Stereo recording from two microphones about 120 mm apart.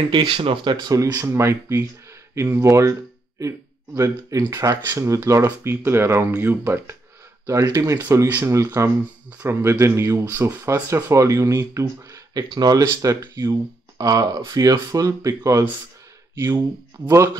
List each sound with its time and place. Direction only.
0.1 s speech: 40° right (ahead or behind); by 17.3 s 20° right (ahead or behind)